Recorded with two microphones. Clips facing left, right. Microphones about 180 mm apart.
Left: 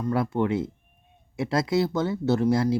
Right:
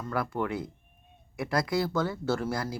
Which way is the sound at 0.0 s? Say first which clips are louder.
Left 6 dB; 25° left (ahead or behind).